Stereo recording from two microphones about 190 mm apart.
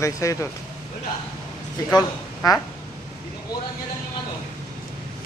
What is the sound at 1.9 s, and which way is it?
Speech, 20° left (ahead or behind).